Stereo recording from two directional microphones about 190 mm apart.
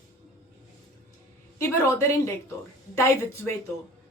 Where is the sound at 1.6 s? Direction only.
15° left (ahead or behind).